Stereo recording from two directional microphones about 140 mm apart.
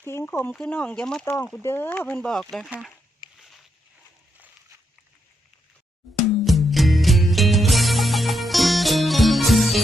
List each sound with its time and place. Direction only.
0.0 s speech: 15° left (ahead or behind)
1.2 s speech: 20° left (ahead or behind)
3.3 s a sound: centre (ahead or behind)
6.4 s music: centre (ahead or behind)